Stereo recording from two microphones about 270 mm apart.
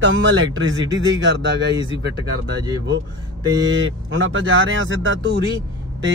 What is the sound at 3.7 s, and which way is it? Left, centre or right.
Speech, right.